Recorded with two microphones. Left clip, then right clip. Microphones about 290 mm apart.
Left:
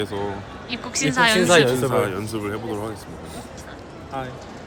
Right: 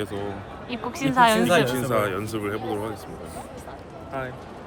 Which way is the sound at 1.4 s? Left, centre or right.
Left.